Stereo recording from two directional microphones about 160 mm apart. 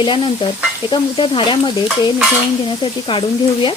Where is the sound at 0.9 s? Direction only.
30° left (ahead or behind).